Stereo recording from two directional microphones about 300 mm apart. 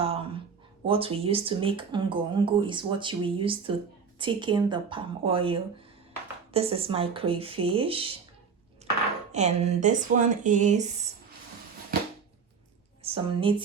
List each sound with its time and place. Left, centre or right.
0.0 s a sound: centre
0.9 s speech: centre
9.3 s speech: right
13.0 s speech: centre